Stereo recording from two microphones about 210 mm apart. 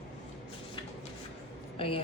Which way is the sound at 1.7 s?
25° left (ahead or behind).